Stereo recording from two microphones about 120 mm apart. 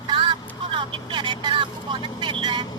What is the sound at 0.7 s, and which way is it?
Vehicle, 45° right (ahead or behind).